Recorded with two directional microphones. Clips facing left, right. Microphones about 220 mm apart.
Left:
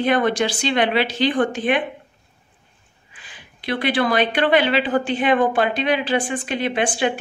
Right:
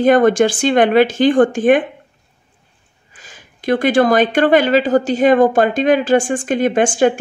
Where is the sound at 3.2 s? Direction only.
45° right (ahead or behind).